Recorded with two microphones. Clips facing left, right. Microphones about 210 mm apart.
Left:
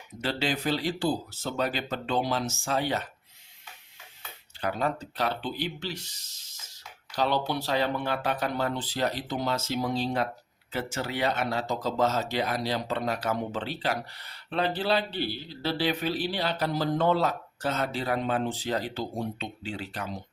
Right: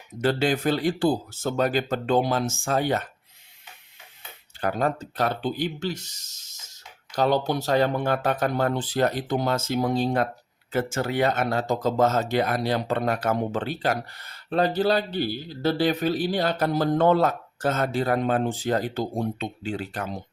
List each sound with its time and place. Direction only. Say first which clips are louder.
0.2 s speech: right 7 dB; 50° right (ahead or behind)
4.6 s speech: right 4 dB; 45° right (ahead or behind)